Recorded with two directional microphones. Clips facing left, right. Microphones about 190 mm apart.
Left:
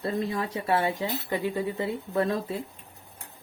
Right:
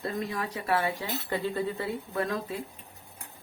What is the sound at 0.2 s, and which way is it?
Speech, 25° left (ahead or behind).